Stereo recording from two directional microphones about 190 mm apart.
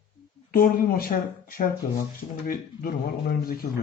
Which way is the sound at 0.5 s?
50° left (ahead or behind).